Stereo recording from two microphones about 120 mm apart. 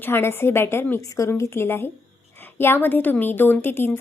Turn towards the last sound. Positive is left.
turn(degrees=20)  # may be behind; listen again after turning